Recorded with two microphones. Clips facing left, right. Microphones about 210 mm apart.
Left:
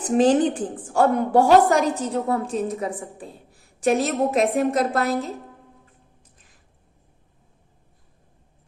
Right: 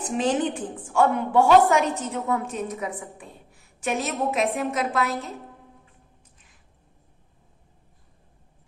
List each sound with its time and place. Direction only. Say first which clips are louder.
0.2 s a woman's voice: left 6 dB; 35° left (ahead or behind)